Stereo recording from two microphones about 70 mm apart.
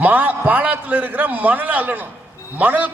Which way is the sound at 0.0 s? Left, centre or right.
Right.